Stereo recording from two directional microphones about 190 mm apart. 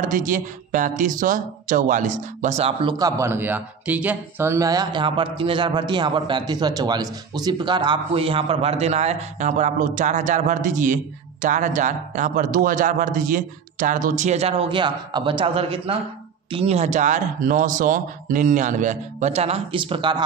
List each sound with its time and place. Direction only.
0.0 s speech: 45° right (ahead or behind); by 20.2 s 25° right (ahead or behind)